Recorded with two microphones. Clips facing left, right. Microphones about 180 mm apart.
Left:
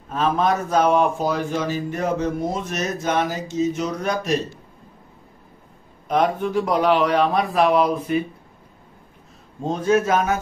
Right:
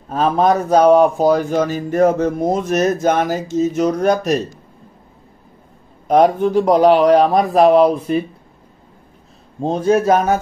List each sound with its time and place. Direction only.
0.1 s a man's voice: 40° right (ahead or behind)
6.0 s a man's voice: 40° right (ahead or behind)
9.6 s a man's voice: 30° right (ahead or behind)